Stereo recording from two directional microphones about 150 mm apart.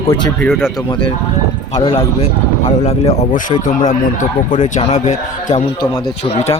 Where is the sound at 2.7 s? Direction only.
45° left (ahead or behind).